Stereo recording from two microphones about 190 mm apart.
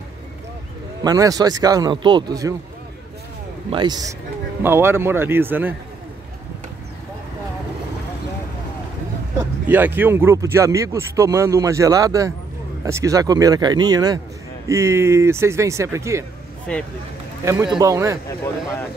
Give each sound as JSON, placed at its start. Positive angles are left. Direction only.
{"t": 1.0, "sound": "speech", "side_deg": -20}
{"t": 3.7, "sound": "speech", "side_deg": -20}
{"t": 9.4, "sound": "speech", "side_deg": -10}
{"t": 16.7, "sound": "speech", "side_deg": 5}
{"t": 17.4, "sound": "speech", "side_deg": -15}